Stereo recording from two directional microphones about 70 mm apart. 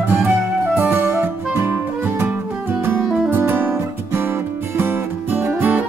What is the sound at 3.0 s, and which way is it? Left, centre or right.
Music, centre.